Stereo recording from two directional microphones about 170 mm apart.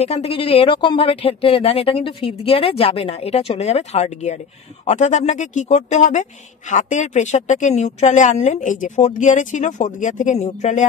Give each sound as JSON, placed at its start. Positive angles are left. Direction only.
{"t": 0.0, "sound": "a woman's voice", "side_deg": 35}